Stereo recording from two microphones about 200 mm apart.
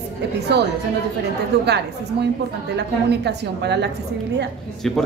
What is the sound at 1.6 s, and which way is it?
A woman's voice, 55° right (ahead or behind).